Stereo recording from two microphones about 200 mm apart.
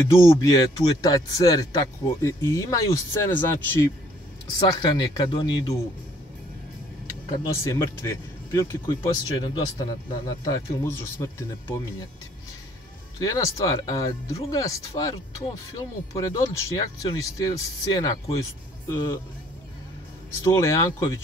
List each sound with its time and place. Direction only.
0.1 s speech: 15° left (ahead or behind)
7.5 s speech: 15° left (ahead or behind)
13.2 s speech: 15° left (ahead or behind)
20.2 s speech: 15° left (ahead or behind)